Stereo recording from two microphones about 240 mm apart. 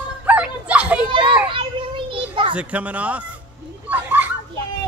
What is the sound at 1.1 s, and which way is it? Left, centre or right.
Children playing, centre.